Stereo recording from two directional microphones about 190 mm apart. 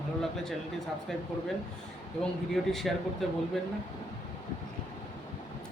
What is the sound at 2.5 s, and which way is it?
Speech, centre (ahead or behind).